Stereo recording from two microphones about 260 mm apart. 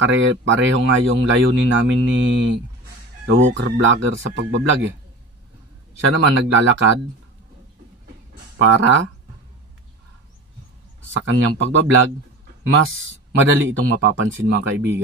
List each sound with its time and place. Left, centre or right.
0.0 s speech: right
5.9 s speech: right
8.5 s speech: right
11.0 s speech: right